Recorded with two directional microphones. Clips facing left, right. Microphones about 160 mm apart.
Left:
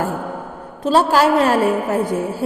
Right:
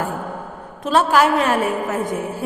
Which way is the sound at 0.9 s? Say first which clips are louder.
Left 2 dB; 30° left (ahead or behind).